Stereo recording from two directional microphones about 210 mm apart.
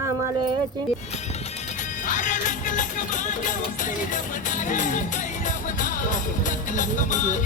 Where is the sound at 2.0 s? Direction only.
35° left (ahead or behind).